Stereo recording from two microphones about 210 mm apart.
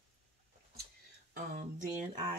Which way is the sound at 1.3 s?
40° right (ahead or behind).